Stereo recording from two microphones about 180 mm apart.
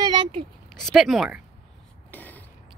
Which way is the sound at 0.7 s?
Centre (ahead or behind).